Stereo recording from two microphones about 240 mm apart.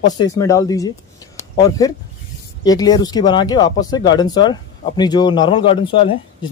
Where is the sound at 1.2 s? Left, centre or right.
Centre.